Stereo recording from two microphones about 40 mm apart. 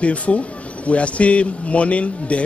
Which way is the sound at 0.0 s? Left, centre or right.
Left.